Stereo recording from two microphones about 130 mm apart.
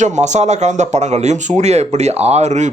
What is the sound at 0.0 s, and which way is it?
Speech, 65° right (ahead or behind).